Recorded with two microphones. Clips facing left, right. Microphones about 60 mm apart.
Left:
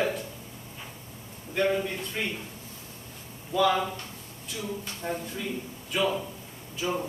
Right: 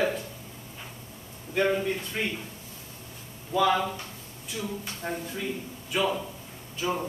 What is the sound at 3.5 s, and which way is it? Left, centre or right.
Speech, centre.